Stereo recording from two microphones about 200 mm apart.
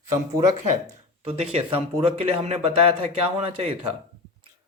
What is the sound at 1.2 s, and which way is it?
Speech, 30° right (ahead or behind).